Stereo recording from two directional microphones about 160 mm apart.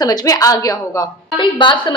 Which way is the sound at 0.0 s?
25° left (ahead or behind).